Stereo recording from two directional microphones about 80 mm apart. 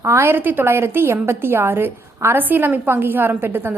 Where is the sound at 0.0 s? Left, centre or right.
Right.